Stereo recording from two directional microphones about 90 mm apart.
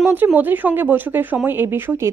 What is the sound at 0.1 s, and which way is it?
Speech, 20° right (ahead or behind).